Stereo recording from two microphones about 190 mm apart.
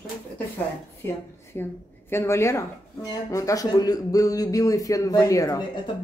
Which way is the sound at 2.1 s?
15° left (ahead or behind).